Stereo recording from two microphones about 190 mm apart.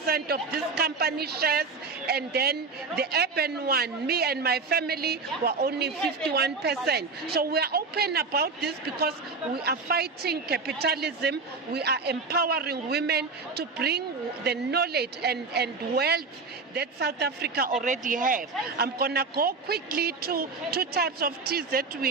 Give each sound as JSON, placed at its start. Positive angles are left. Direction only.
{"t": 0.0, "sound": "a man's voice", "side_deg": -55}
{"t": 17.7, "sound": "a man's voice", "side_deg": -40}